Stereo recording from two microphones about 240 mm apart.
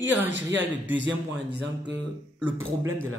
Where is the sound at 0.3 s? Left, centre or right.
Right.